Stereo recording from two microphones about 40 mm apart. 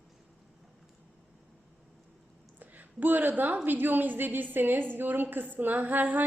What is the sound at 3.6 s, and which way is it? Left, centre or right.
A woman's voice, right.